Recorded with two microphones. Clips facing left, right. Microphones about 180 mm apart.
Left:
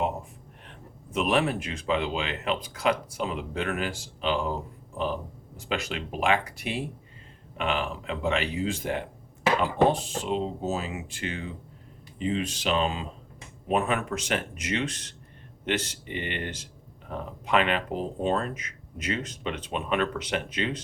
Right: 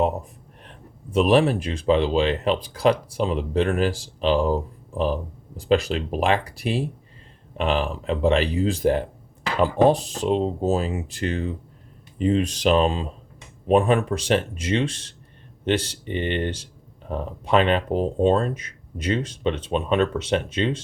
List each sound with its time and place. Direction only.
1.1 s speech: 35° right (ahead or behind)
5.5 s speech: 35° right (ahead or behind)